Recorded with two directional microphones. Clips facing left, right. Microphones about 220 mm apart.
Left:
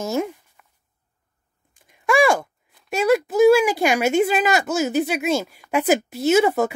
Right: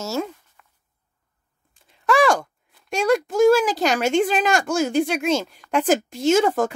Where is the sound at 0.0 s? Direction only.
15° left (ahead or behind).